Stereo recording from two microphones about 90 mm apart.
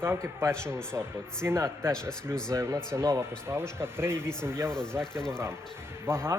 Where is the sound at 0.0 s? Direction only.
25° right (ahead or behind).